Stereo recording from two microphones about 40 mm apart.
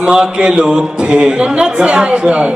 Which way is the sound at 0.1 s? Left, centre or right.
Right.